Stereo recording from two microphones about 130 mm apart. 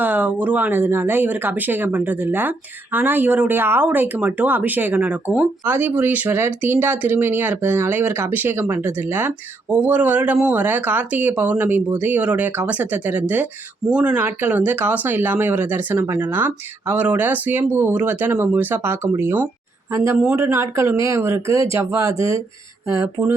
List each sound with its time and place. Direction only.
0.0 s speech: 15° right (ahead or behind)